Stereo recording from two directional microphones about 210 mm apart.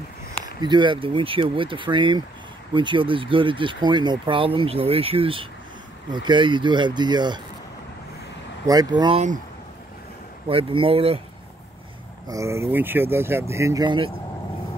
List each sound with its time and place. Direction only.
0.6 s speech: 20° right (ahead or behind)
8.6 s speech: 20° right (ahead or behind)
10.5 s speech: 25° right (ahead or behind)
12.3 s speech: 15° right (ahead or behind)